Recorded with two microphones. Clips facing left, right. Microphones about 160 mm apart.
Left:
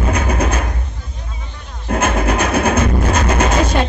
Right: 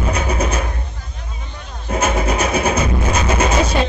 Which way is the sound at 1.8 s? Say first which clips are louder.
Left 2 dB; 55° left (ahead or behind).